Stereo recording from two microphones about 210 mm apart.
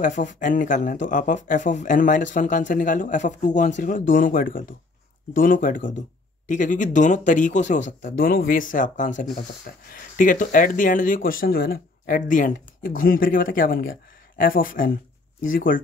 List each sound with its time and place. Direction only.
0.0 s speech: 35° left (ahead or behind)